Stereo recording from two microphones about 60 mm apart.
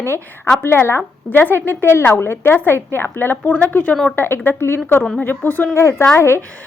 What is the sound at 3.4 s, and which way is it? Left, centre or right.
Speech, left.